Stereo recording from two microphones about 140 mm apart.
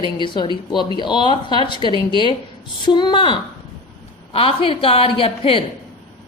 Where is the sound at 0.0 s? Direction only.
35° left (ahead or behind).